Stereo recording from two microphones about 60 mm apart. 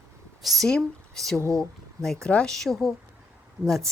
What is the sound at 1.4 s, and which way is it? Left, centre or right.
Speech, right.